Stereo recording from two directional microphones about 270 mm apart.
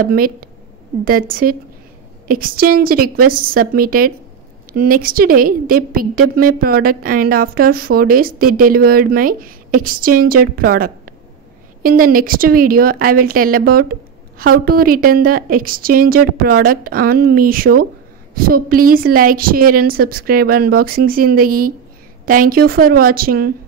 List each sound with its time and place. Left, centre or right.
0.0 s a woman's voice: right